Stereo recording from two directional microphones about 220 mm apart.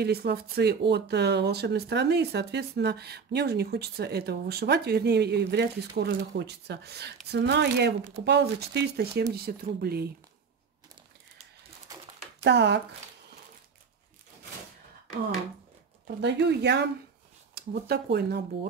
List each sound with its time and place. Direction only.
0.0 s speech: 45° right (ahead or behind)
12.4 s speech: 50° right (ahead or behind)
16.2 s speech: 50° right (ahead or behind)